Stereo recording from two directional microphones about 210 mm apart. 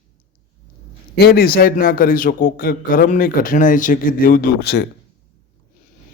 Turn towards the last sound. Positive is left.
turn(degrees=50)  # may be behind; listen again after turning